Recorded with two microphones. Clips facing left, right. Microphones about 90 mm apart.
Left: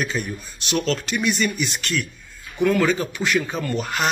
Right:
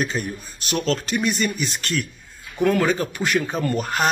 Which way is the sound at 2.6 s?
15° right (ahead or behind).